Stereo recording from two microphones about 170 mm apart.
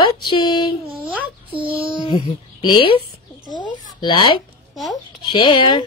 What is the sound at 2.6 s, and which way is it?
Speech, 30° left (ahead or behind).